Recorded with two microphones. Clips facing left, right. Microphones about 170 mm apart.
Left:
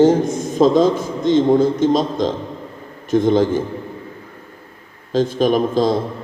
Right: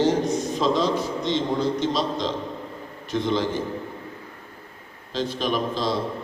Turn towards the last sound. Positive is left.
turn(degrees=45)  # may be behind; listen again after turning